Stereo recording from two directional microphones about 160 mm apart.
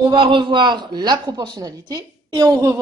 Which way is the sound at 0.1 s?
30° right (ahead or behind).